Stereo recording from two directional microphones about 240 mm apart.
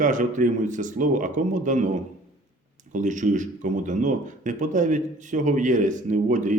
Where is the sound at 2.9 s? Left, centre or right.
Right.